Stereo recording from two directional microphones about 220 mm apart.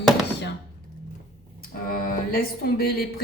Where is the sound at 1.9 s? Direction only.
45° left (ahead or behind).